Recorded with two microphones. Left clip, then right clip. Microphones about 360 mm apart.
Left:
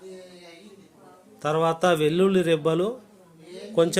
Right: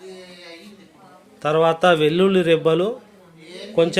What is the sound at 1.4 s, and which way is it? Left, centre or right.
Speech, left.